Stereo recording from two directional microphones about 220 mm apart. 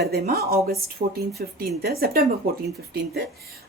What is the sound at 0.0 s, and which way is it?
Speech, 45° right (ahead or behind).